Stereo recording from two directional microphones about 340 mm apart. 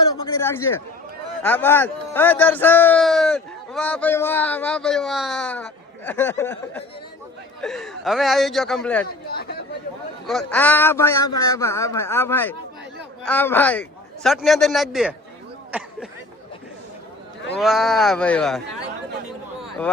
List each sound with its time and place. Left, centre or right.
0.4 s a man's voice: centre
9.3 s speech: left
10.2 s a man's voice: centre
17.6 s a man's voice: centre